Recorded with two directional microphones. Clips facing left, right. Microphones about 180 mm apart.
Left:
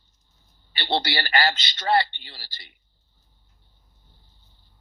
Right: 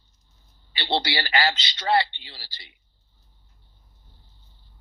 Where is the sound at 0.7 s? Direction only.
50° left (ahead or behind).